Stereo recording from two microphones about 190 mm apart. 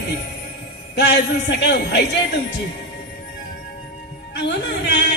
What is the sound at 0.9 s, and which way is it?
A man's voice, 60° left (ahead or behind).